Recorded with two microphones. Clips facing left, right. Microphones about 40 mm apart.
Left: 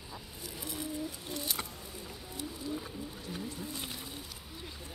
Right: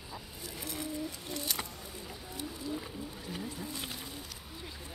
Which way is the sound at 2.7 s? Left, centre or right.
Centre.